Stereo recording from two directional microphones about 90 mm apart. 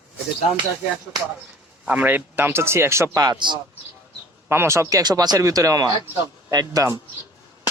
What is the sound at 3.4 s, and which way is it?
Speech, 60° right (ahead or behind).